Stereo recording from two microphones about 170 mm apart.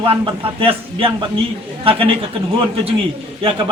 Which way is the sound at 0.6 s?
30° right (ahead or behind).